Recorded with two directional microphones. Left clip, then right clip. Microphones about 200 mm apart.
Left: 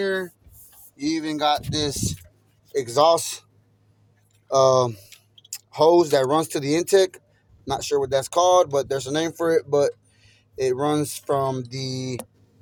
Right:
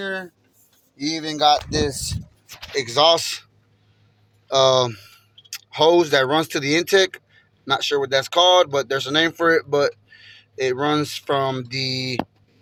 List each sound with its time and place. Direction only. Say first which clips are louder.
0.9 s speech: right 2 dB; 35° right (ahead or behind)
2.7 s speech: right 1 dB; 10° left (ahead or behind)
4.4 s speech: right 1 dB; 10° left (ahead or behind)